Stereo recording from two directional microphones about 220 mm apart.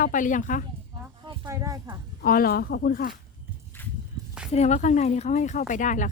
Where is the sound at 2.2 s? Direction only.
40° left (ahead or behind).